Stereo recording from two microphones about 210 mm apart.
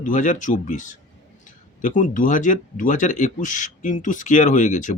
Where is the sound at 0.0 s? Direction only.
40° left (ahead or behind).